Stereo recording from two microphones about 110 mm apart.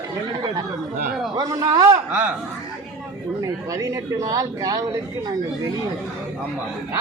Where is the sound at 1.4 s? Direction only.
30° right (ahead or behind).